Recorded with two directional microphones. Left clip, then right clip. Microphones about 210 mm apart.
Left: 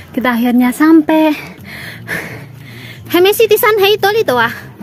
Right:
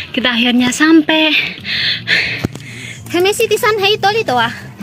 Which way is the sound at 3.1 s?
30° left (ahead or behind).